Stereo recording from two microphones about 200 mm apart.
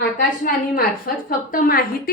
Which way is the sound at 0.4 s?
45° left (ahead or behind).